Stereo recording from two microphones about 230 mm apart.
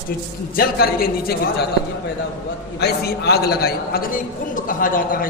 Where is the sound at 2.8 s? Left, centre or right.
Left.